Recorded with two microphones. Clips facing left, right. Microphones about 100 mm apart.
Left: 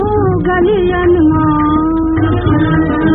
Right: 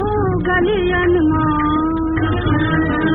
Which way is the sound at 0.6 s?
25° left (ahead or behind).